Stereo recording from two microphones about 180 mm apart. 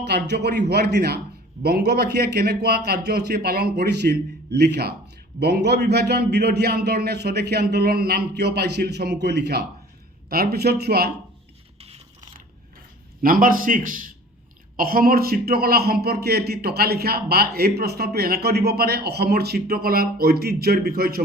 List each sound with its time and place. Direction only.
0.0 s a man's voice: 65° right (ahead or behind)
11.8 s scrape: 35° right (ahead or behind)
13.2 s a man's voice: 50° right (ahead or behind)